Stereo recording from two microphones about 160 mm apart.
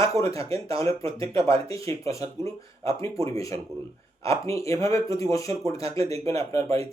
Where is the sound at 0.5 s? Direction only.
20° left (ahead or behind).